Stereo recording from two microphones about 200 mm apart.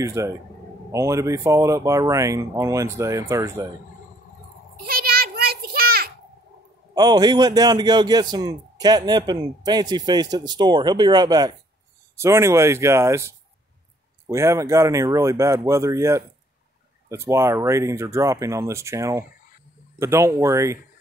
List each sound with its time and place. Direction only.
0.0 s speech: 15° right (ahead or behind)
4.8 s a sound: 50° right (ahead or behind)
7.0 s a man's voice: 20° right (ahead or behind)